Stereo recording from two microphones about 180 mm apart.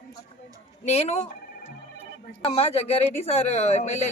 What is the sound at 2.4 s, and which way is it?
Speech, 35° left (ahead or behind).